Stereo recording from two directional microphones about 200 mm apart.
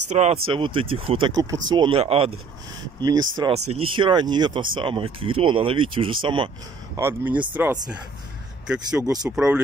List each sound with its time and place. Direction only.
0.1 s speech: 35° right (ahead or behind)
0.5 s speech: 25° right (ahead or behind)
7.0 s speech: 10° right (ahead or behind)
9.0 s speech: 20° right (ahead or behind)
9.3 s speech: 5° right (ahead or behind)